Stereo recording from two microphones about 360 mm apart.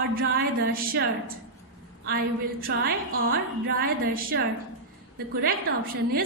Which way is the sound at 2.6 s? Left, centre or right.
Right.